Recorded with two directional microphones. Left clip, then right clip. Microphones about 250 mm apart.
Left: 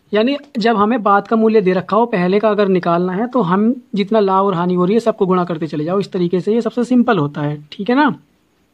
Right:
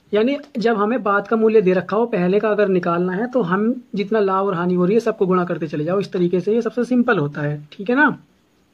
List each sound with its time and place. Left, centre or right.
0.1 s speech: left